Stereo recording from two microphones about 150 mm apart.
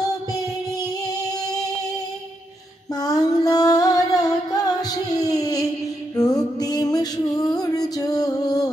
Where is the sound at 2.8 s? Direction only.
25° left (ahead or behind).